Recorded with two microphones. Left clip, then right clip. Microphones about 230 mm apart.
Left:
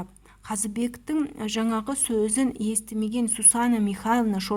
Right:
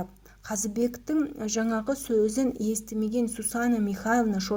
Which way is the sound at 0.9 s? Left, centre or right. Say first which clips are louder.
Even; left.